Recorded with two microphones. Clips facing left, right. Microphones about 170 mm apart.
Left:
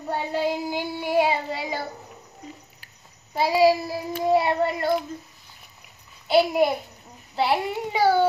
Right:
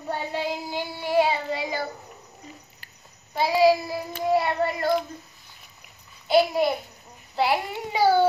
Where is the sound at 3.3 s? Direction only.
5° left (ahead or behind).